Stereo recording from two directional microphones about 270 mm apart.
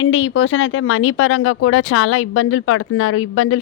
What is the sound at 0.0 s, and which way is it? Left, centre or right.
Speech, left.